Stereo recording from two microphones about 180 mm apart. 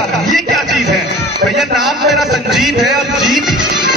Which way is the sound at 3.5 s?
25° right (ahead or behind).